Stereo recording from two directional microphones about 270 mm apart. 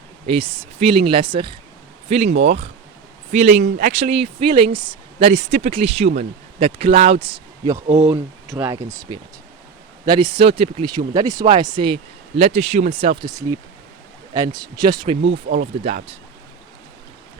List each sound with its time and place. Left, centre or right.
0.3 s speech: right
8.1 s speech: centre
15.2 s speech: right
15.8 s speech: right